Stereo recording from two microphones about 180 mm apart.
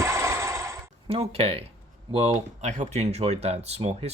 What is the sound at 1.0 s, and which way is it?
Speech, 35° right (ahead or behind).